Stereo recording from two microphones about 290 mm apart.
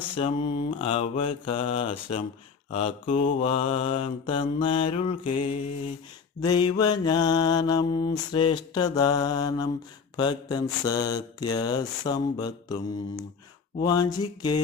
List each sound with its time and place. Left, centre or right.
0.2 s mantra: centre
13.8 s mantra: centre